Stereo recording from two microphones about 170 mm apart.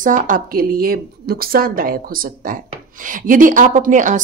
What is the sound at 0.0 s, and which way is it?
A woman's voice, 50° right (ahead or behind).